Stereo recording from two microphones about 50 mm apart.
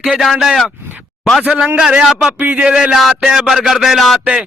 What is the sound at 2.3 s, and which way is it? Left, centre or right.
Speech, right.